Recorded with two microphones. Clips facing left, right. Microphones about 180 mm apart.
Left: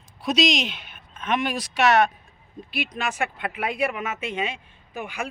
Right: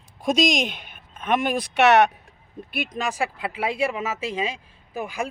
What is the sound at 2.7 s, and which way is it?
Speech, 50° right (ahead or behind).